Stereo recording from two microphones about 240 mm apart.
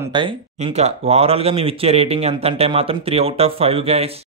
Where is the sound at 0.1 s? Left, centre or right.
Right.